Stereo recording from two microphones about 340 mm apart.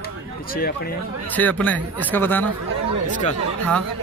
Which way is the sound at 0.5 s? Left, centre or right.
Left.